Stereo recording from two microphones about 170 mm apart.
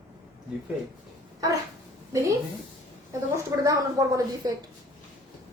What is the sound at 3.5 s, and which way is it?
A woman's voice, 20° right (ahead or behind).